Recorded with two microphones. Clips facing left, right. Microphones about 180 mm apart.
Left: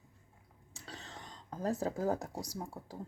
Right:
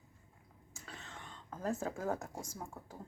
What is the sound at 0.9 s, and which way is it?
Whispering, 35° left (ahead or behind).